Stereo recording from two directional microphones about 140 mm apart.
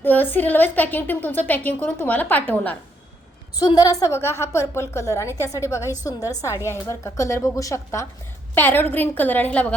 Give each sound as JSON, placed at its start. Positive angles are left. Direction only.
{"t": 0.0, "sound": "a woman's voice", "side_deg": 15}
{"t": 3.8, "sound": "a woman's voice", "side_deg": 25}